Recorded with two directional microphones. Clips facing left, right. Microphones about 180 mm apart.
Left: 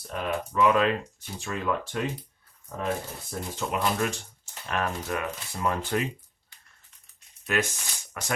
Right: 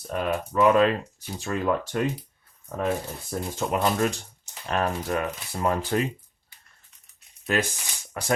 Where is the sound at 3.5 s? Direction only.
40° right (ahead or behind).